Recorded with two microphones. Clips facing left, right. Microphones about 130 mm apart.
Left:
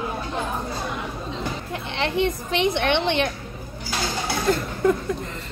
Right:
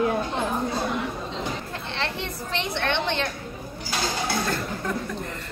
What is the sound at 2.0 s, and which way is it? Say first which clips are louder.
A woman's voice: left 9 dB; 15° left (ahead or behind).